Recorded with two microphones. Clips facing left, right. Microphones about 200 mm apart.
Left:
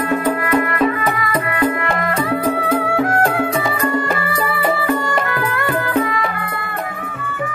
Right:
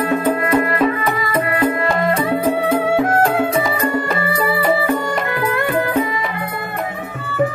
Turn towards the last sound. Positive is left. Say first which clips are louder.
# left 1 dB
turn(degrees=-25)  # may be behind; listen again after turning